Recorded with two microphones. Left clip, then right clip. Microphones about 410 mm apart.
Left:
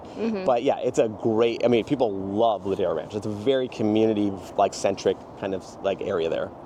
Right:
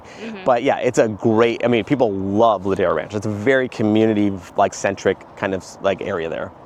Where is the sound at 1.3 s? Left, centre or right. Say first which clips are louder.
Right 6 dB; right.